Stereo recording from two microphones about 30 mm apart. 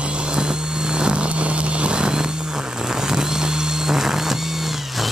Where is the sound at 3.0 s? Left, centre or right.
Right.